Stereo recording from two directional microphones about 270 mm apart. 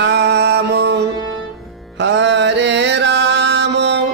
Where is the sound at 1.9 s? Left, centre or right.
Right.